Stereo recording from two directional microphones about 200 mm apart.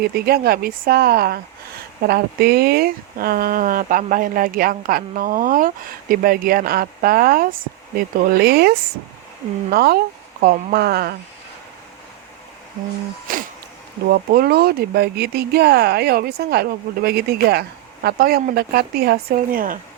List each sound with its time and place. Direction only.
0.0 s speech: 50° right (ahead or behind)
13.3 s speech: 45° right (ahead or behind)